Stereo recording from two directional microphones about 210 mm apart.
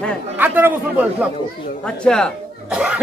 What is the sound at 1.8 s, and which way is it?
A man's voice, 5° left (ahead or behind).